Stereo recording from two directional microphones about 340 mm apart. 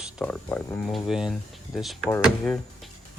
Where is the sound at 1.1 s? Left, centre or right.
Centre.